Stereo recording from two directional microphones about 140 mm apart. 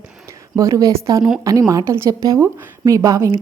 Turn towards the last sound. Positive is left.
turn(degrees=-25)  # may be behind; listen again after turning